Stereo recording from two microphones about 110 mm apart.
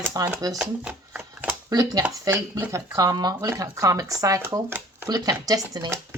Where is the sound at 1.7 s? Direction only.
35° right (ahead or behind).